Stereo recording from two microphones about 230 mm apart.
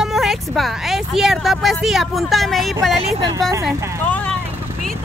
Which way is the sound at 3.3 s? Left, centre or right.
Centre.